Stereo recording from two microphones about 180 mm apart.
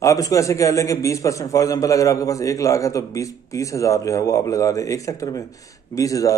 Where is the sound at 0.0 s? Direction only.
20° left (ahead or behind).